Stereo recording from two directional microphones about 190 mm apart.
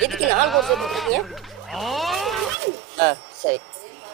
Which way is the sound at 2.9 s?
15° left (ahead or behind).